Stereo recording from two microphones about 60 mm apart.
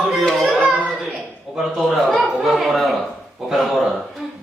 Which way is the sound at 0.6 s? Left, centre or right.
Centre.